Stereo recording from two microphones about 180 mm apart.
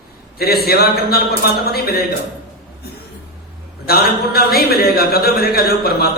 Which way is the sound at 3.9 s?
60° left (ahead or behind).